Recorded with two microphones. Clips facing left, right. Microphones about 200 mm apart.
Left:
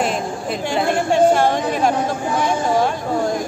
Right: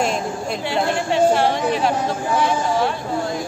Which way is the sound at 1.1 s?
45° left (ahead or behind).